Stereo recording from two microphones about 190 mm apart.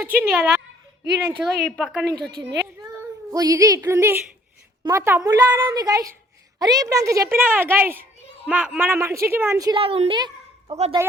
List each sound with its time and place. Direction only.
0.1 s a woman's voice: 10° right (ahead or behind)
1.0 s speech: 60° right (ahead or behind)
1.6 s a woman's voice: centre (ahead or behind)
3.3 s a woman's voice: 20° right (ahead or behind)
9.8 s a woman's voice: 30° right (ahead or behind)